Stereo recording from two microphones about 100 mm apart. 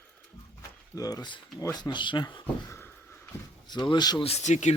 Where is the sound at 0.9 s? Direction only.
40° left (ahead or behind).